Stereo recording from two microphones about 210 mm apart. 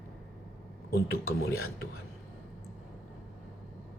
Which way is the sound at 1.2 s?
85° left.